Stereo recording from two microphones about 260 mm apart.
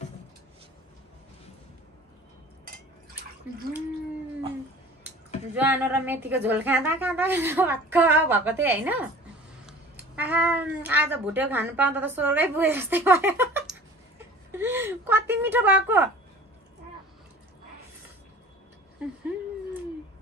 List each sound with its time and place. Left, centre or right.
5.5 s a woman's voice: centre